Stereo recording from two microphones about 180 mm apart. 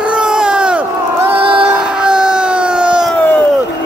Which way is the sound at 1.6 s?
5° right (ahead or behind).